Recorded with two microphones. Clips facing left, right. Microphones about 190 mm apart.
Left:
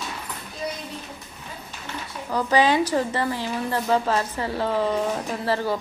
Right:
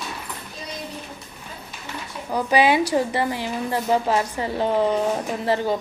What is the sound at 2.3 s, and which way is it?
A woman's voice, 15° right (ahead or behind).